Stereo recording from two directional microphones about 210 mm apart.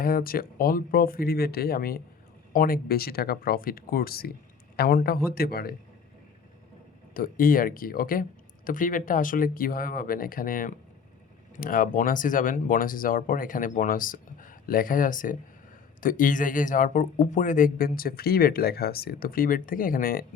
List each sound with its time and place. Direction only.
0.0 s speech: 45° left (ahead or behind)
7.1 s speech: 40° left (ahead or behind)